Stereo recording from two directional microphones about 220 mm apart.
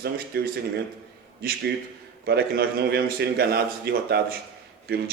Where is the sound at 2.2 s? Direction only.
45° right (ahead or behind).